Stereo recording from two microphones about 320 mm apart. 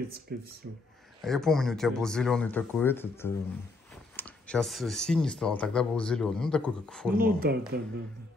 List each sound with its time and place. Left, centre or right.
0.3 s speech: right
1.2 s speech: centre
7.2 s speech: right